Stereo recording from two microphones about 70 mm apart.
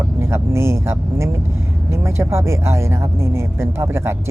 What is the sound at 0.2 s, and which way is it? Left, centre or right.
Speech, right.